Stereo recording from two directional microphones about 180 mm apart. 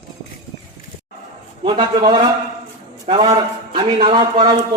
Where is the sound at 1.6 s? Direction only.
30° right (ahead or behind).